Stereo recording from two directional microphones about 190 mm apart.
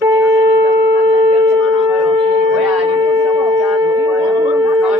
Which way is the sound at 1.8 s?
10° right (ahead or behind).